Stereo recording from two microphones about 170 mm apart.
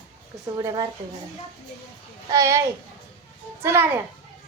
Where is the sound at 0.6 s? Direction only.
20° right (ahead or behind).